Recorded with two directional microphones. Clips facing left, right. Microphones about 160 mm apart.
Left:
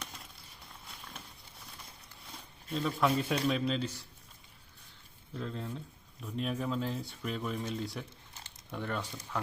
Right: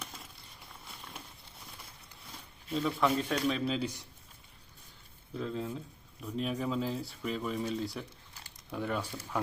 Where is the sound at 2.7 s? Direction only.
5° right (ahead or behind).